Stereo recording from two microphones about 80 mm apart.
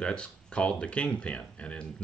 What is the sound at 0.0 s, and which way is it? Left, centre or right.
Speech, centre.